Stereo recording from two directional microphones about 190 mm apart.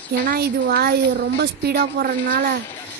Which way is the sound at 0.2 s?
50° right (ahead or behind).